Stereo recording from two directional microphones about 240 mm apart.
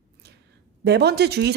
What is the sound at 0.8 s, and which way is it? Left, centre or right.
Speech, right.